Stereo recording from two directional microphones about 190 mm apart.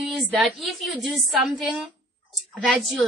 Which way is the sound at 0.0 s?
Centre (ahead or behind).